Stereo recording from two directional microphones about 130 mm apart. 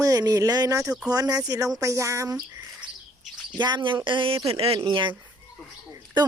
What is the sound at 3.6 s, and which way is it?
Speech, 35° right (ahead or behind).